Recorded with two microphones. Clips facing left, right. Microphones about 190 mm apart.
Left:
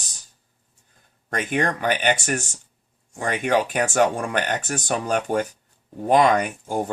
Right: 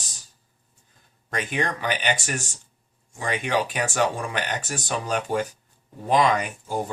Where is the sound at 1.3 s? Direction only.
45° left (ahead or behind).